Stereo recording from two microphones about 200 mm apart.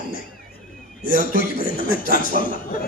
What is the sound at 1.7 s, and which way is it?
Speech, 45° left (ahead or behind).